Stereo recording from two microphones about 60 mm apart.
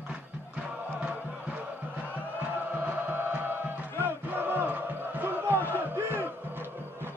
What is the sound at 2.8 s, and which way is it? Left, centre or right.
Music, right.